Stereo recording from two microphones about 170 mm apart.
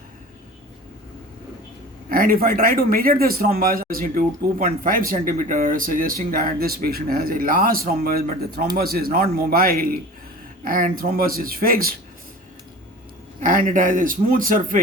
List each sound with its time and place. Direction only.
2.0 s speech: 60° right (ahead or behind)
13.4 s speech: 50° right (ahead or behind)